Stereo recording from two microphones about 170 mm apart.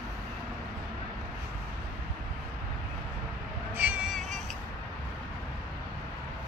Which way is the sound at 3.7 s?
10° right (ahead or behind).